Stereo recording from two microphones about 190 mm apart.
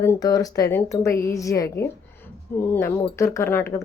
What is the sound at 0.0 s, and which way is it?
Speech, 15° left (ahead or behind).